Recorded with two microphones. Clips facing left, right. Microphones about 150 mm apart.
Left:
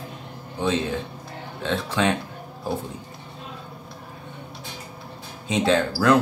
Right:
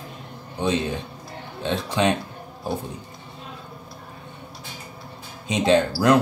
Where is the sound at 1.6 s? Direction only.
15° right (ahead or behind).